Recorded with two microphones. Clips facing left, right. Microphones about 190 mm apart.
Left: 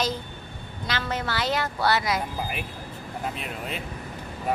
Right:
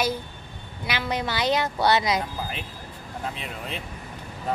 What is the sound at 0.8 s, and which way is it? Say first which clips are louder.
Speech: right 2 dB; 15° right (ahead or behind).